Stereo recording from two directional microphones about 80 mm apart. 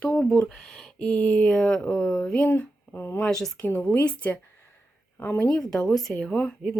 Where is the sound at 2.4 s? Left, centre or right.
Left.